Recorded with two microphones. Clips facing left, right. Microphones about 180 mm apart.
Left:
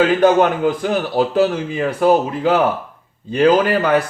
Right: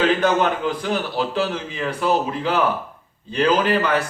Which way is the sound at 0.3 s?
50° left (ahead or behind).